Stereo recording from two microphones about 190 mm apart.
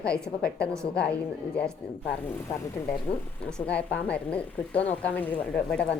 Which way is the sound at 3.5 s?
5° left (ahead or behind).